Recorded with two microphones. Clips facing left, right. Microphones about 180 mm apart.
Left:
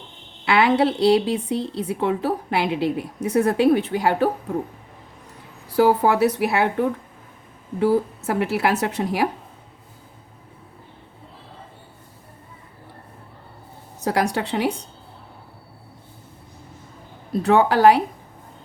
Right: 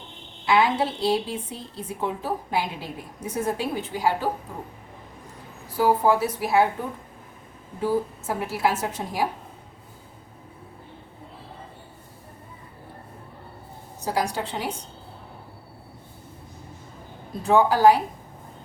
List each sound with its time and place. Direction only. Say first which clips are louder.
0.4 s a woman's voice: left 4 dB; 70° left (ahead or behind)
5.6 s a woman's voice: left 3 dB; 70° left (ahead or behind)
14.0 s a woman's voice: left 4 dB; 70° left (ahead or behind)
17.4 s a woman's voice: left 2 dB; 70° left (ahead or behind)